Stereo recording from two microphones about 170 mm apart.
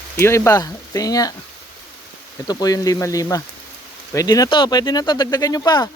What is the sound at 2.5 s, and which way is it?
Speech, 20° left (ahead or behind).